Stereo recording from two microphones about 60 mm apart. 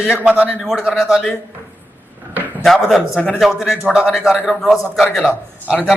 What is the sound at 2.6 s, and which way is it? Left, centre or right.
A man's voice, centre.